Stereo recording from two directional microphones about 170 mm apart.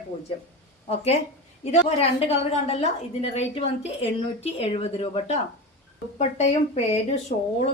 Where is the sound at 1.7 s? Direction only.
35° left (ahead or behind).